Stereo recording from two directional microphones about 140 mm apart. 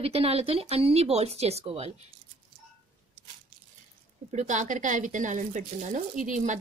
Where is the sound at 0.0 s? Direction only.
45° right (ahead or behind).